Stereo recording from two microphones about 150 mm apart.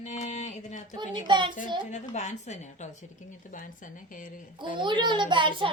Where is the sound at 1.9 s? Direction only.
50° left (ahead or behind).